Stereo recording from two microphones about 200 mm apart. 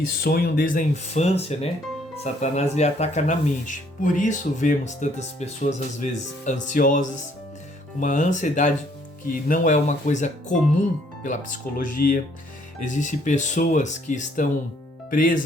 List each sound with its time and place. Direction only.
0.3 s speech: 50° left (ahead or behind)